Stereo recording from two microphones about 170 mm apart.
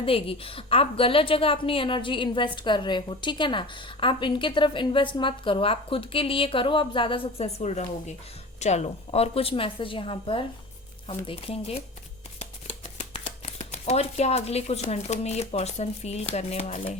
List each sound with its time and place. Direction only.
0.0 s a woman's voice: 35° left (ahead or behind)